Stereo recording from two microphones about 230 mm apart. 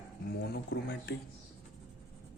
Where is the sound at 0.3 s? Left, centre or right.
Left.